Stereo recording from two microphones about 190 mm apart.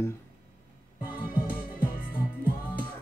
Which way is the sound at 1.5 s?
50° left (ahead or behind).